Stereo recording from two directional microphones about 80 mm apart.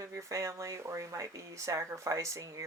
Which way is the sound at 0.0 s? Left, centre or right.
Right.